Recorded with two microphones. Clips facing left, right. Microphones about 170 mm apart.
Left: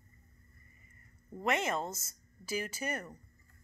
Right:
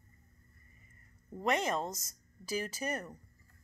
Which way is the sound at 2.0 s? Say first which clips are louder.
Right 1 dB; 35° right (ahead or behind).